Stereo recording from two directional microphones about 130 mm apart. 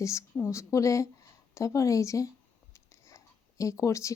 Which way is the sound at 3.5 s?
25° left (ahead or behind).